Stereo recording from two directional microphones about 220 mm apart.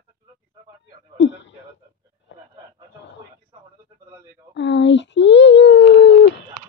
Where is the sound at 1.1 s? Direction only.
55° left (ahead or behind).